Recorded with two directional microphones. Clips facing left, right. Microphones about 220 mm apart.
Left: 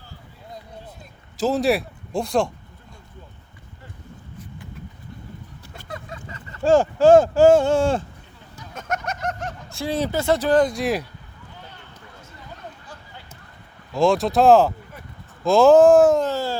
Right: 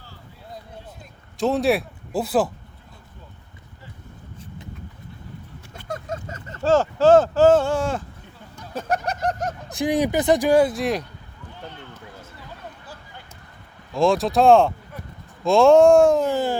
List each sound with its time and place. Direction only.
1.4 s speech: centre (ahead or behind)
5.9 s vehicle: 45° right (ahead or behind)
6.6 s speech: 15° left (ahead or behind)
7.7 s speech: 30° left (ahead or behind)
8.7 s a sound: 35° right (ahead or behind)
9.6 s speech: 15° right (ahead or behind); by 11.0 s centre (ahead or behind)
13.9 s speech: centre (ahead or behind)
16.2 s speech: 15° right (ahead or behind)